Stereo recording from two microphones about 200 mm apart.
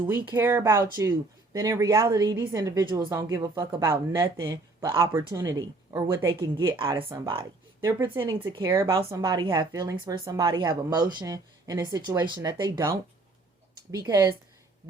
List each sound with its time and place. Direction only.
0.1 s speech: 10° right (ahead or behind)